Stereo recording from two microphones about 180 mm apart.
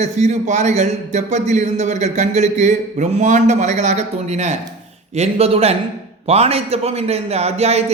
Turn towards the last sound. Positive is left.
turn(degrees=-35)  # may be behind; listen again after turning